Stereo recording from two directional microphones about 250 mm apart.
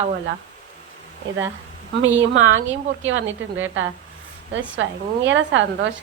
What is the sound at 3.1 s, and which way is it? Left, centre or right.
A woman's voice, right.